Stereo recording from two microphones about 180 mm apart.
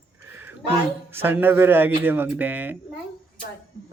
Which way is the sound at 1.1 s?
10° right (ahead or behind).